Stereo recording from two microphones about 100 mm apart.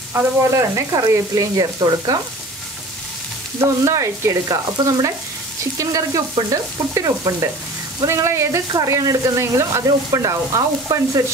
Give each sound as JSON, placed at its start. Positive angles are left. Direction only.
{"t": 0.1, "sound": "speech", "side_deg": -30}
{"t": 3.6, "sound": "speech", "side_deg": -30}
{"t": 4.8, "sound": "frying", "side_deg": -45}
{"t": 5.8, "sound": "speech", "side_deg": -35}